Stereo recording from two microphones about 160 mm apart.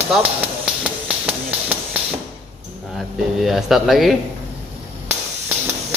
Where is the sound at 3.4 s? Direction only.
Centre (ahead or behind).